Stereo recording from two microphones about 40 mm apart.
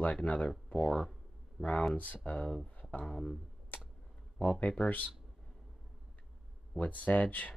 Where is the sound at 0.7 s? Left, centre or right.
Centre.